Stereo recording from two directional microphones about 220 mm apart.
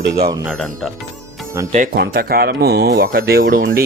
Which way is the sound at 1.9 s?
45° right (ahead or behind).